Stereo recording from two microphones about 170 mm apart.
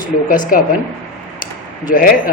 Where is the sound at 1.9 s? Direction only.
55° left (ahead or behind).